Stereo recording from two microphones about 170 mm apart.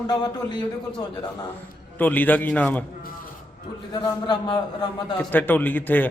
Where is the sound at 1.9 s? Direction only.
10° left (ahead or behind).